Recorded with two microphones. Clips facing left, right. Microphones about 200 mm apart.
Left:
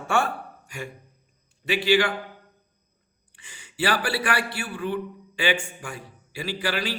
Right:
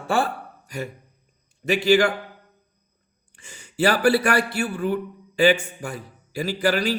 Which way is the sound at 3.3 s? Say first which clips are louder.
Right 8 dB; 45° right (ahead or behind).